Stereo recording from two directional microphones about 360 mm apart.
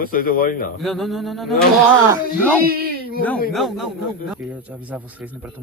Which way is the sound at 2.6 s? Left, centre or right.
Right.